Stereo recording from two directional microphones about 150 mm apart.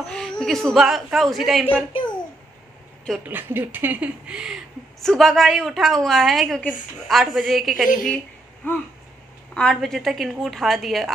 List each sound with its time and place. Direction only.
0.0 s a woman's voice: 5° left (ahead or behind)
3.3 s a woman's voice: 15° right (ahead or behind)
8.6 s a sound: 10° left (ahead or behind)
9.5 s a woman's voice: 5° left (ahead or behind)